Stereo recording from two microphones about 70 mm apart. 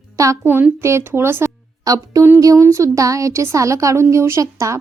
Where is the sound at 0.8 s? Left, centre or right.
Right.